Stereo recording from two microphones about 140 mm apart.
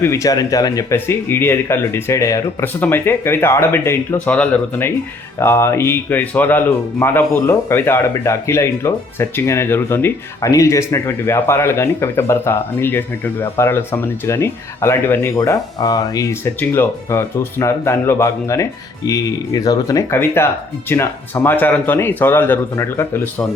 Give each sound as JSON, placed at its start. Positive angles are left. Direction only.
{"t": 0.0, "sound": "speech", "side_deg": 20}
{"t": 15.4, "sound": "speech", "side_deg": 25}